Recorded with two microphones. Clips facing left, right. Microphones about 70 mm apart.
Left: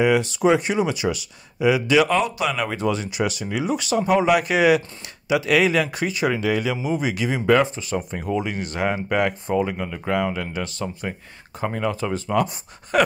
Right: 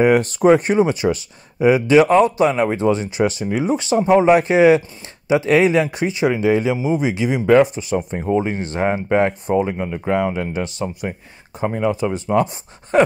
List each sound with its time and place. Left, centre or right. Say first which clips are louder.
0.0 s speech: right 4 dB; right